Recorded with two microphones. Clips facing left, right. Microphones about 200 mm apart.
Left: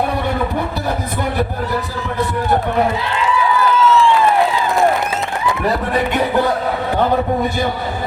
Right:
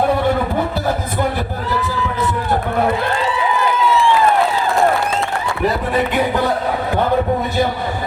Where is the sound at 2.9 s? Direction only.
50° right (ahead or behind).